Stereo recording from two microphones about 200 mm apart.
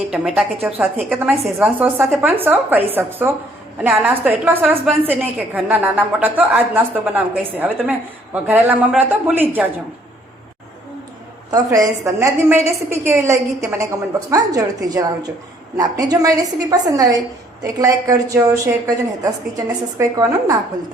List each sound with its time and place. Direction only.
0.1 s a woman's voice: 5° right (ahead or behind)
11.5 s a woman's voice: 15° right (ahead or behind)